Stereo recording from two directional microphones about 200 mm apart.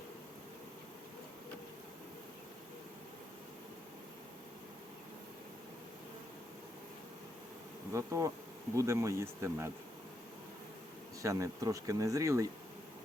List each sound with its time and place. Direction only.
7.9 s speech: 15° right (ahead or behind)
11.2 s speech: 15° right (ahead or behind)